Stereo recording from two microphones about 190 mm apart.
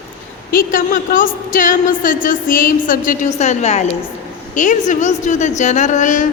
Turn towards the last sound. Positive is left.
turn(degrees=40)  # may be behind; listen again after turning